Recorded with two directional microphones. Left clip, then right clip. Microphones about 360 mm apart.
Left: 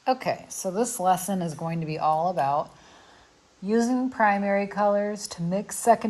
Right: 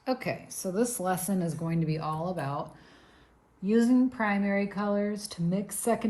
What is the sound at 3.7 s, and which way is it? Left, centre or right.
A woman's voice, centre.